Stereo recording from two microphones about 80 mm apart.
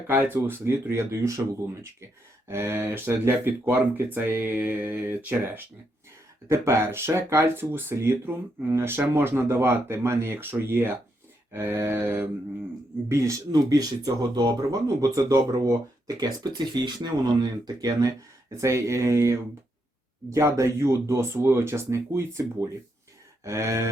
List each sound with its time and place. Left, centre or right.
0.1 s speech: right
2.5 s speech: right
13.1 s speech: right
13.5 s speech: right
17.7 s speech: right